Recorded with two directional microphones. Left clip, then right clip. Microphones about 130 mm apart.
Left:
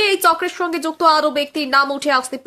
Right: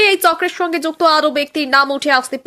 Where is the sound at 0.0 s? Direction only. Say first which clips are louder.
Right 3 dB; 25° right (ahead or behind).